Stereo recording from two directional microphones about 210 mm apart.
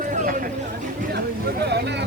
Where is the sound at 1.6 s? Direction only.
55° right (ahead or behind).